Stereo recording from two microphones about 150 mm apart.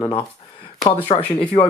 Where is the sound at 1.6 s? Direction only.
30° left (ahead or behind).